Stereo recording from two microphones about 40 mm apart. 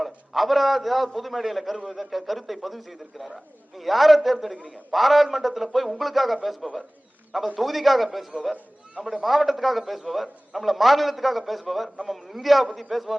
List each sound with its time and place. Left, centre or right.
0.0 s a man's voice: centre
4.5 s a man's voice: right
4.9 s a man's voice: centre